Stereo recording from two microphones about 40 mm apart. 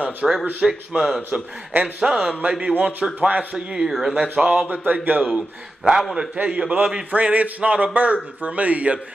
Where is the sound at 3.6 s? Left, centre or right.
Centre.